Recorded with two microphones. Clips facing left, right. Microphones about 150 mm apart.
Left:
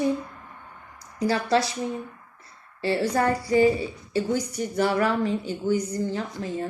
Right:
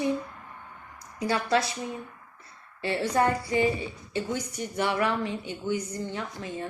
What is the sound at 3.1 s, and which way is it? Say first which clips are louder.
A woman's voice: left 2 dB; 35° left (ahead or behind).